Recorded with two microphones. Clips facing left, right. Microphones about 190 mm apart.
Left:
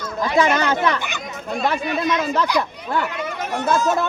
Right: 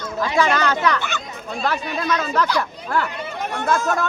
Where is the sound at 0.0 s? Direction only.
20° left (ahead or behind).